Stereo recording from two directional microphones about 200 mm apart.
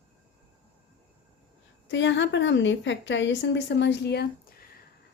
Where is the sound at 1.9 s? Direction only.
65° left (ahead or behind).